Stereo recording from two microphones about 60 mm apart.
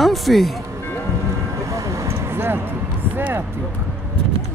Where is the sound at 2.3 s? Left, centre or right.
Right.